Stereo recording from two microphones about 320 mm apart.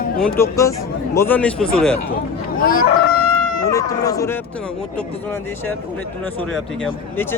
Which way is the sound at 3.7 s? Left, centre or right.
Centre.